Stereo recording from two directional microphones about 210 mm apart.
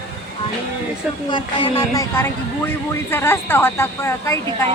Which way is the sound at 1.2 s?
20° left (ahead or behind).